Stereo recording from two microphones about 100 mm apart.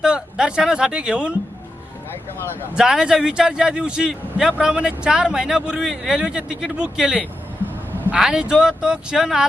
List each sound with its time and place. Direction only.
0.0 s a man's voice: 5° right (ahead or behind)
2.7 s a man's voice: 5° right (ahead or behind)